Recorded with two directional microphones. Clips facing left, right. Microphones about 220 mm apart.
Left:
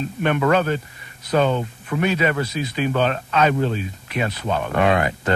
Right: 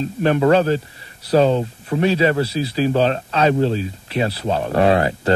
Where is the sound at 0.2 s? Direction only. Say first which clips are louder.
Right 4 dB; 30° right (ahead or behind).